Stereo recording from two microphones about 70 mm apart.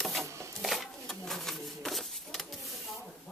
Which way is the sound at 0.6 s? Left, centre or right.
Centre.